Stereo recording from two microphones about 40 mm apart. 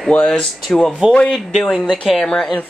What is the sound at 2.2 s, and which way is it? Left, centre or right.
Speech, centre.